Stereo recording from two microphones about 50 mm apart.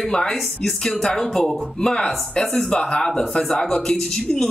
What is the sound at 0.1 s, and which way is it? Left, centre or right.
Speech, centre.